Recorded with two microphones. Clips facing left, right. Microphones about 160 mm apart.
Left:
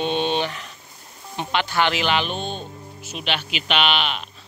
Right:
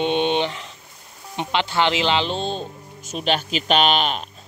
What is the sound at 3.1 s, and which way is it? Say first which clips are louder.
Speech: right 5 dB; 40° right (ahead or behind).